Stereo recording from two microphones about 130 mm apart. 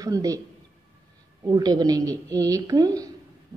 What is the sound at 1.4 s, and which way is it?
A woman's voice, 30° right (ahead or behind).